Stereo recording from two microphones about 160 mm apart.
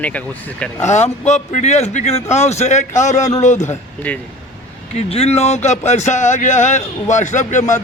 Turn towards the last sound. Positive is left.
turn(degrees=50)  # may be behind; listen again after turning